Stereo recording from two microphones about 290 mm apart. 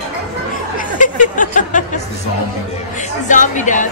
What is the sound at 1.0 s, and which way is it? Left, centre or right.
Speech, left.